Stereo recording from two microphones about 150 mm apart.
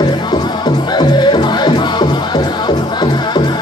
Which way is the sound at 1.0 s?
30° left (ahead or behind).